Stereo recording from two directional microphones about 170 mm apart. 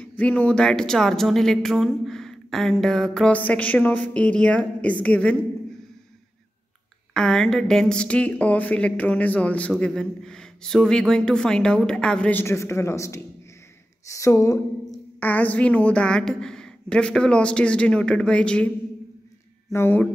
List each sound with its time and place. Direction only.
0.0 s a woman's voice: 10° left (ahead or behind)
7.2 s a woman's voice: 5° left (ahead or behind)
19.7 s a woman's voice: 10° left (ahead or behind)